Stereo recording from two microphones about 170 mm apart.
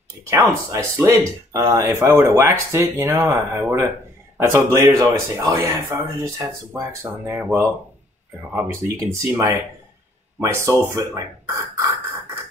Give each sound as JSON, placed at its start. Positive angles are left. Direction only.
{"t": 0.3, "sound": "speech", "side_deg": -15}